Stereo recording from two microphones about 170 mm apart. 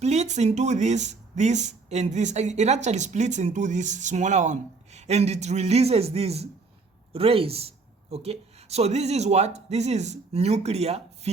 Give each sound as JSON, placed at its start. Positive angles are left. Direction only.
{"t": 0.0, "sound": "speech", "side_deg": -40}